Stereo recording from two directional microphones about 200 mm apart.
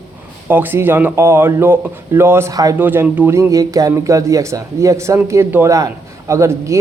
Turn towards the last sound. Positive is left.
turn(degrees=-15)  # may be behind; listen again after turning